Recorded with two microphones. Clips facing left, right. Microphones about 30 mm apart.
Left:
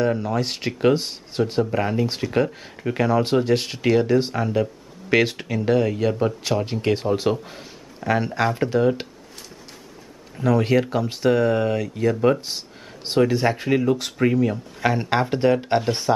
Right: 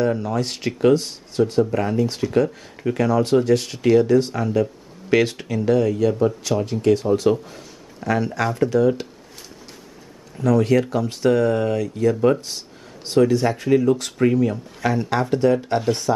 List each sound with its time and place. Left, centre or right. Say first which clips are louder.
0.0 s speech: right 1 dB; centre; by 7.2 s left
7.4 s a sound: even; left
8.4 s speech: right 3 dB; left
10.4 s speech: right 2 dB; left
12.4 s speech: left 1 dB; left
14.8 s speech: even; left